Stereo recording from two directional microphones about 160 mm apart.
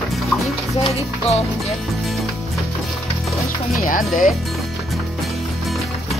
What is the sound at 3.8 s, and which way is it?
Speech, 60° left (ahead or behind).